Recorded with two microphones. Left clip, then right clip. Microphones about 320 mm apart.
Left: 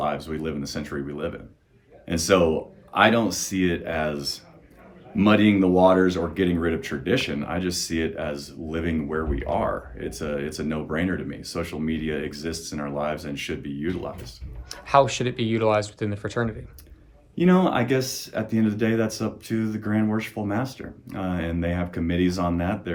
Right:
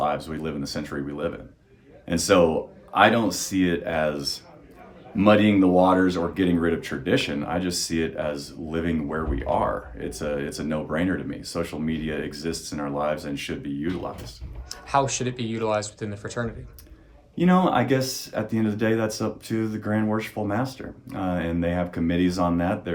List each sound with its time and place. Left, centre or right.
0.0 s speech: centre
14.7 s speech: left
17.3 s speech: centre